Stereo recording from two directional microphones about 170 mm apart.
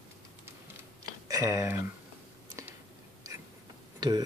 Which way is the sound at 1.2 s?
20° right (ahead or behind).